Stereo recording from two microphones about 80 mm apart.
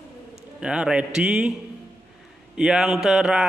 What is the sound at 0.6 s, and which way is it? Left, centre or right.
Speech, centre.